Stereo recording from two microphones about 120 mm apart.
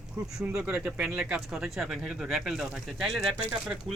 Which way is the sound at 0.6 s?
5° right (ahead or behind).